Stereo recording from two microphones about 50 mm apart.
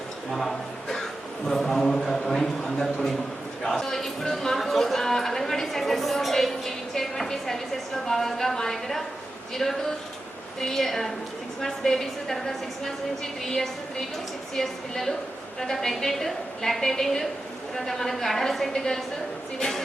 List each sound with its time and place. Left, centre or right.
0.3 s a woman's voice: centre